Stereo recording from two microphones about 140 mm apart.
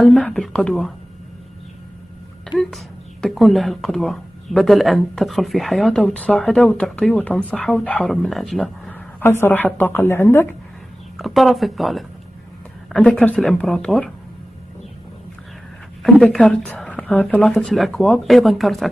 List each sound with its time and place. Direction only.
0.0 s a woman's voice: 10° left (ahead or behind)
2.6 s speech: centre (ahead or behind)
9.2 s a woman's voice: 15° left (ahead or behind)
11.1 s a woman's voice: centre (ahead or behind)
16.0 s speech: 5° left (ahead or behind)